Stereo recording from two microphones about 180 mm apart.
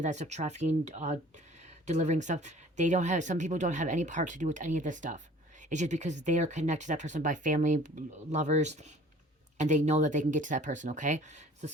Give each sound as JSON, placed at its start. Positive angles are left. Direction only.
{"t": 0.0, "sound": "speech", "side_deg": -40}